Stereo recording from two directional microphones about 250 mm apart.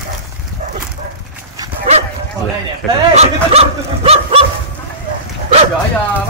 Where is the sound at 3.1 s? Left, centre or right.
Right.